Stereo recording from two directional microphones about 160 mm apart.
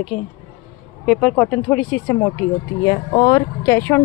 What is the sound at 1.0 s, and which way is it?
Speech, centre (ahead or behind).